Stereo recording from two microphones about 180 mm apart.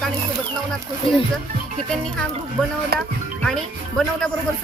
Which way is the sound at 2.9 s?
60° right (ahead or behind).